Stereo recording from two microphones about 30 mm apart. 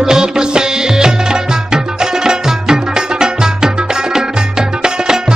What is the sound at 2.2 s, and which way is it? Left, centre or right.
Music, right.